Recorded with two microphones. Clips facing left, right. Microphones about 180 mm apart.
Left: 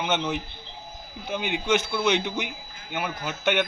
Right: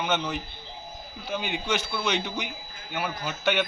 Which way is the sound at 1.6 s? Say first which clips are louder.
Left 8 dB; 20° left (ahead or behind).